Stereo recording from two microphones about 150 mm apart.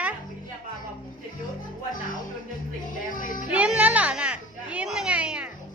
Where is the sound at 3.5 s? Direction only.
10° right (ahead or behind).